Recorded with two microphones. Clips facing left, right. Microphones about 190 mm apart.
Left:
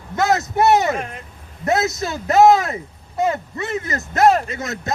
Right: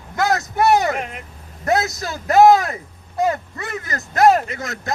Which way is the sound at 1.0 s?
20° right (ahead or behind).